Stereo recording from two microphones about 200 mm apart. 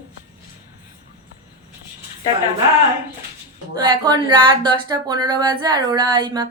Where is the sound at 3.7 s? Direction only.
20° right (ahead or behind).